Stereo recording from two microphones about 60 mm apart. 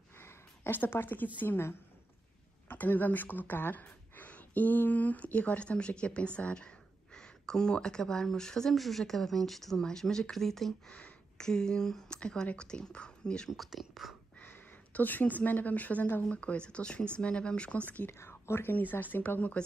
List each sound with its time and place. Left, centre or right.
0.2 s a woman's voice: left
2.7 s speech: left
13.5 s speech: centre
14.4 s a woman's voice: left
18.2 s speech: left
18.8 s speech: left